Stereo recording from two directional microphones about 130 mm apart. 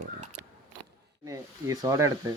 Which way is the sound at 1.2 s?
25° right (ahead or behind).